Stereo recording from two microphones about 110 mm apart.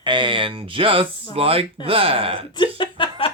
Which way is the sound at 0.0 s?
45° right (ahead or behind).